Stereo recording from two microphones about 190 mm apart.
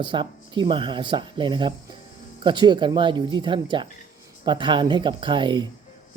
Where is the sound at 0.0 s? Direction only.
25° right (ahead or behind).